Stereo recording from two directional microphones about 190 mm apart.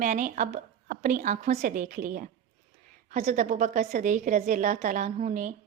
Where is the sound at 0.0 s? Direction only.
40° right (ahead or behind).